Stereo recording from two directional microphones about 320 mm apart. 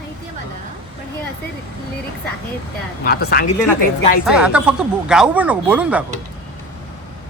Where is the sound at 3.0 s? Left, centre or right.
Left.